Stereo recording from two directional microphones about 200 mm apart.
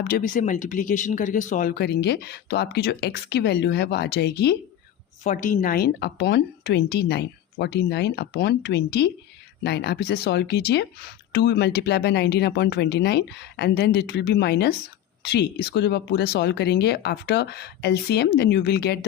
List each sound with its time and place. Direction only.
0.1 s speech: 40° left (ahead or behind)
5.2 s speech: 40° left (ahead or behind); by 18.9 s 55° left (ahead or behind)